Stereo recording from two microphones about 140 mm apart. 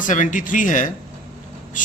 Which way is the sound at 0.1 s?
65° left (ahead or behind).